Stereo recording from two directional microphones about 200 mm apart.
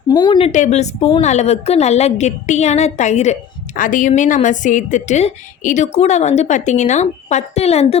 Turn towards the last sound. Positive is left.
turn(degrees=30)  # may be behind; listen again after turning